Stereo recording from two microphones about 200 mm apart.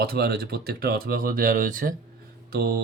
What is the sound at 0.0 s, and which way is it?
Speech, 50° right (ahead or behind).